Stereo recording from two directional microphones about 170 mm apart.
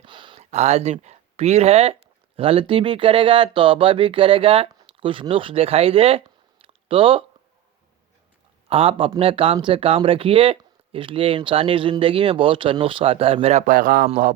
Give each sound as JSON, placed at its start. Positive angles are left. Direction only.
{"t": 0.0, "sound": "a sound", "side_deg": -30}
{"t": 0.5, "sound": "speech", "side_deg": -40}
{"t": 8.7, "sound": "a man's voice", "side_deg": -35}